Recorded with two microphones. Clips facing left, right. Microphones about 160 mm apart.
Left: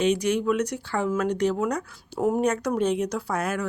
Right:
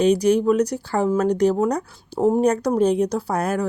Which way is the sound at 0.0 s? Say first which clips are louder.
Right 6 dB; 35° right (ahead or behind).